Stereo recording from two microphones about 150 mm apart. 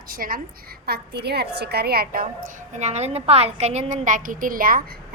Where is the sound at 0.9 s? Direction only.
90° right.